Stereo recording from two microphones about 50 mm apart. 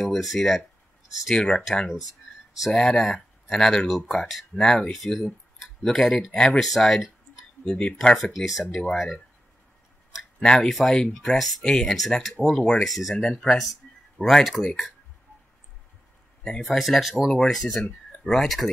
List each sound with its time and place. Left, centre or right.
0.0 s speech: centre
1.3 s speech: centre
2.7 s speech: centre
6.3 s speech: centre
7.6 s speech: centre
8.7 s speech: centre
10.4 s speech: centre
13.1 s speech: centre
14.6 s speech: centre
16.6 s speech: centre